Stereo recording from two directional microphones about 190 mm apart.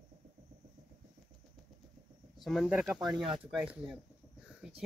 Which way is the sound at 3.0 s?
25° right (ahead or behind).